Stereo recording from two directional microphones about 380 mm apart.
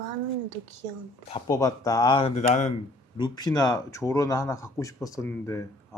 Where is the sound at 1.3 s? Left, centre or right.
Centre.